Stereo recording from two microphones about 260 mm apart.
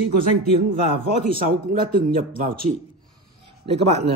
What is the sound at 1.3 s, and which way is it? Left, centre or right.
Speech, right.